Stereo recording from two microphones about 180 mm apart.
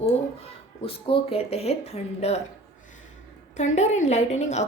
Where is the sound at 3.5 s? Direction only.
40° left (ahead or behind).